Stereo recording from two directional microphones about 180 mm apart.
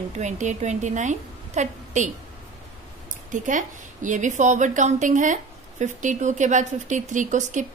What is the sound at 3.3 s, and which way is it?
A woman's voice, 45° right (ahead or behind).